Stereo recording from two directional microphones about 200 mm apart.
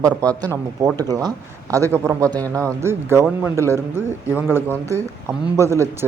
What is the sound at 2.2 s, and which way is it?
Speech, 10° left (ahead or behind).